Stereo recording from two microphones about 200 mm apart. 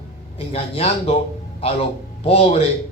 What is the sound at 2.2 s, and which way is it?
Speech, 30° left (ahead or behind).